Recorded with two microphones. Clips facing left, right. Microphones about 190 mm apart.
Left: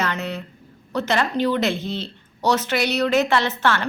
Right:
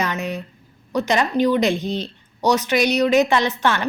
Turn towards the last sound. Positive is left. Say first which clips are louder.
# right 1 dB
turn(degrees=-15)  # may be behind; listen again after turning